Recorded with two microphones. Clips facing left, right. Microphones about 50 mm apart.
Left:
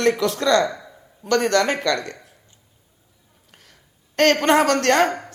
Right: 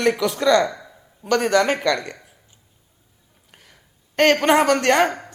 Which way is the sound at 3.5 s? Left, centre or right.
Centre.